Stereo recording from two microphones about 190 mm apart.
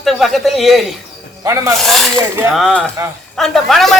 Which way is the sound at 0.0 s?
Centre (ahead or behind).